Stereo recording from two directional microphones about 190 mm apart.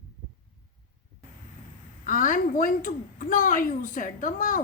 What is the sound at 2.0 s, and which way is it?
A woman's voice, 45° left (ahead or behind).